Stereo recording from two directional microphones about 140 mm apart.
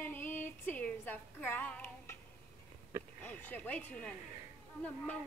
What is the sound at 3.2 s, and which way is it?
Speech, 15° left (ahead or behind).